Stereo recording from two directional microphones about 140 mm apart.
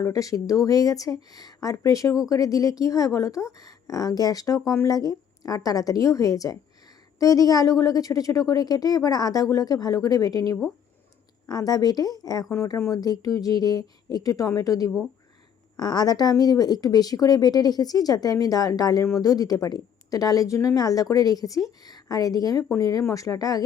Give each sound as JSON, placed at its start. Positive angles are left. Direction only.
{"t": 0.0, "sound": "a woman's voice", "side_deg": 25}